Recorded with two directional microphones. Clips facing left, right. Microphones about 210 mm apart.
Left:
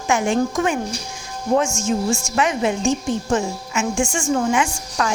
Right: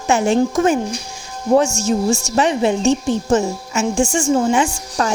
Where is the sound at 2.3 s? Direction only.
30° right (ahead or behind).